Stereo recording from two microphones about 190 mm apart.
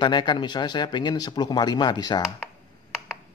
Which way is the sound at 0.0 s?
25° left (ahead or behind).